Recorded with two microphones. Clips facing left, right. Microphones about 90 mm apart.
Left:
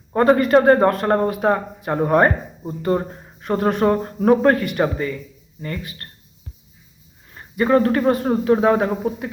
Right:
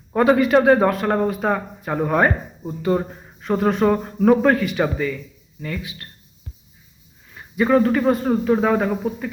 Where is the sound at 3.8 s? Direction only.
15° left (ahead or behind).